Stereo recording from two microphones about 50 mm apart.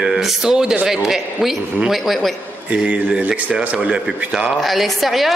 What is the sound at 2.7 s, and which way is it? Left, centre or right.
Speech, right.